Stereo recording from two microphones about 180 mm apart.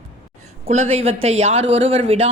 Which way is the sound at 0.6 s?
40° right (ahead or behind).